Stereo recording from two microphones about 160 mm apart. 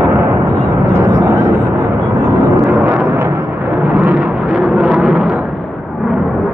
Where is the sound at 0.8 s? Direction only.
15° right (ahead or behind).